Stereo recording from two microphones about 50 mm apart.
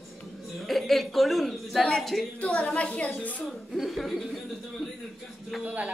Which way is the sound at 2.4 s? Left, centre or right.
Left.